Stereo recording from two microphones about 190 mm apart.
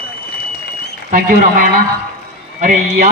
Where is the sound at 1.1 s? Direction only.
45° right (ahead or behind).